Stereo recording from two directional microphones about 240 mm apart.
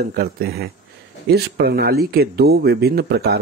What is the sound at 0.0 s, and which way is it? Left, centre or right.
Speech, right.